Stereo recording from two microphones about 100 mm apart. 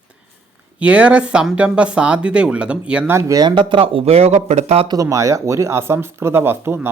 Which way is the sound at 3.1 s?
30° right (ahead or behind).